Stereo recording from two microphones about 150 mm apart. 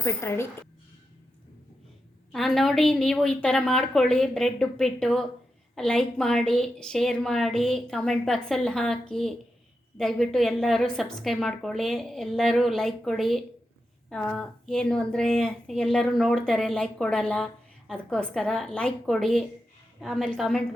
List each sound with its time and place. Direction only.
0.0 s a woman's voice: 15° left (ahead or behind)
2.3 s speech: centre (ahead or behind)